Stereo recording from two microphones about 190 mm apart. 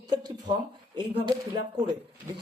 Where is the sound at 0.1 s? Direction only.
20° right (ahead or behind).